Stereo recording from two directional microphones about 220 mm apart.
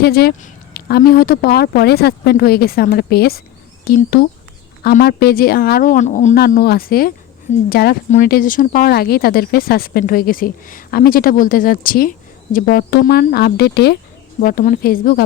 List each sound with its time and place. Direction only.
0.0 s speech: 45° left (ahead or behind)